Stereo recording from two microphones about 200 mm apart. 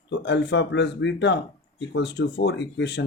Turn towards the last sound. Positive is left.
turn(degrees=60)  # may be behind; listen again after turning